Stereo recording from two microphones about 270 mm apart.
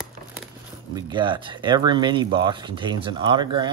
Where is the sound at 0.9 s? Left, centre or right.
Centre.